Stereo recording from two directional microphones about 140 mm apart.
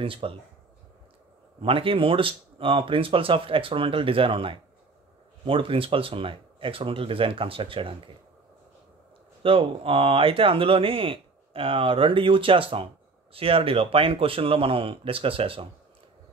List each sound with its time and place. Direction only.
0.0 s speech: 40° right (ahead or behind)
1.6 s speech: 40° right (ahead or behind)
9.4 s speech: 40° right (ahead or behind)